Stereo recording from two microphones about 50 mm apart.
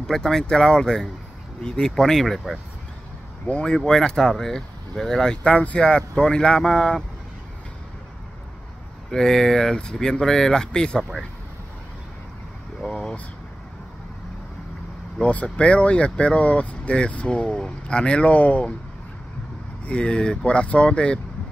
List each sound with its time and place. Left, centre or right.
0.0 s speech: centre
3.6 s speech: centre
5.4 s speech: left
9.1 s speech: centre
12.8 s a sound: centre
15.2 s speech: left
19.8 s speech: left